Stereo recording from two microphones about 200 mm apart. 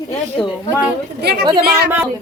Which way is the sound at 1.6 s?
50° right (ahead or behind).